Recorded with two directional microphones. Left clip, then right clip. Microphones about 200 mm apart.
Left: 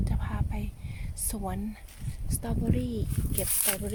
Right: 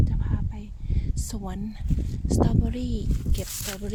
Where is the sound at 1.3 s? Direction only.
15° right (ahead or behind).